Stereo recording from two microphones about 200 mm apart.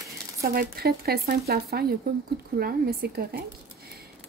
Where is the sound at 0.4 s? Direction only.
50° right (ahead or behind).